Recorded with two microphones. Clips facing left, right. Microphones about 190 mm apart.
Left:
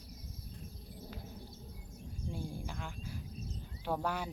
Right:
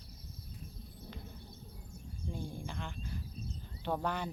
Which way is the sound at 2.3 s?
5° left (ahead or behind).